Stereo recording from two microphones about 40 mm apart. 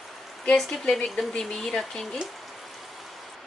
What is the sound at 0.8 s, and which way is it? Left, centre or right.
Speech, left.